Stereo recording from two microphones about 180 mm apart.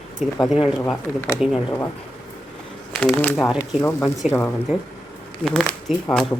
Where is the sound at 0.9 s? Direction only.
15° left (ahead or behind).